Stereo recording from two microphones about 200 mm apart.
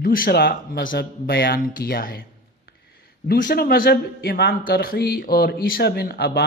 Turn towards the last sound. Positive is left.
turn(degrees=50)  # may be behind; listen again after turning